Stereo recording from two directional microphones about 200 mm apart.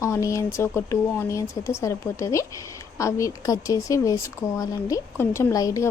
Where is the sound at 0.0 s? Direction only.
15° left (ahead or behind).